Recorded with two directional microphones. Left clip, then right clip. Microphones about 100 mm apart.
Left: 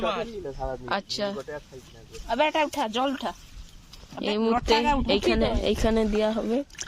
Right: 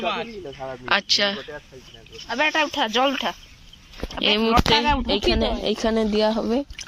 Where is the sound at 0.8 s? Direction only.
5° left (ahead or behind).